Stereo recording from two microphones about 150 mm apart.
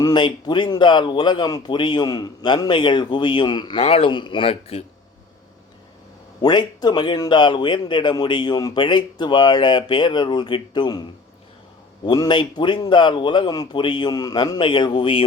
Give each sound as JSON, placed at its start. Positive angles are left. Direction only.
{"t": 0.0, "sound": "a man's voice", "side_deg": 30}
{"t": 6.4, "sound": "speech", "side_deg": 30}
{"t": 12.0, "sound": "a man's voice", "side_deg": 30}